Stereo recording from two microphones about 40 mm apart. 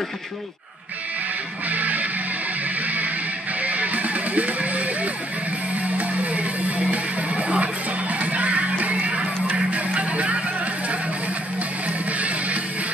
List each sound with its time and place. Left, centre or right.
1.7 s music: right
3.6 s music: right
12.1 s music: right